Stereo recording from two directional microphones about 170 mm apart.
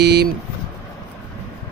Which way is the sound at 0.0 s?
75° right (ahead or behind).